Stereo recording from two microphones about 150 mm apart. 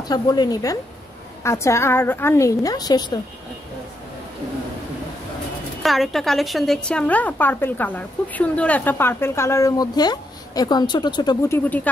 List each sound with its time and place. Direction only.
0.1 s a woman's voice: 25° left (ahead or behind)
5.8 s a woman's voice: centre (ahead or behind); by 11.3 s 30° left (ahead or behind)
11.4 s a woman's voice: 15° left (ahead or behind)